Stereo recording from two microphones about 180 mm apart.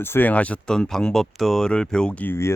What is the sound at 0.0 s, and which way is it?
Speech, 10° left (ahead or behind).